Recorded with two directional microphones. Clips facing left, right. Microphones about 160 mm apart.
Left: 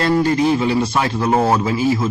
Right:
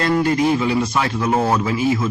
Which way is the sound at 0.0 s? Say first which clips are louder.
Left 1 dB; 30° left (ahead or behind).